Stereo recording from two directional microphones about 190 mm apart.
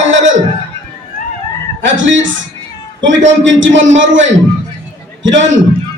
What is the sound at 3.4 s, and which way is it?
A man's voice, 80° right.